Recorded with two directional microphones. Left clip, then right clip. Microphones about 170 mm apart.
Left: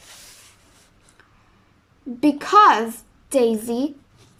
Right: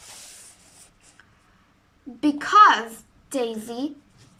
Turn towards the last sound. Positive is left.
turn(degrees=25)  # may be behind; listen again after turning